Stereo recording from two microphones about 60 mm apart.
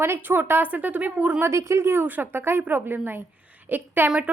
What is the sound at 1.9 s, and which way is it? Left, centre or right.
A woman's voice, right.